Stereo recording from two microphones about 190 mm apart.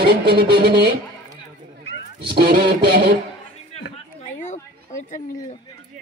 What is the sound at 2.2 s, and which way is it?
Music, 55° right (ahead or behind).